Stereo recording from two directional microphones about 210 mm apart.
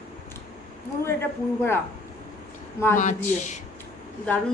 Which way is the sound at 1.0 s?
10° left (ahead or behind).